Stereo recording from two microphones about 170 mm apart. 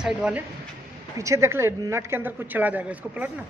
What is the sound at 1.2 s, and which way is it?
Speech, 15° right (ahead or behind).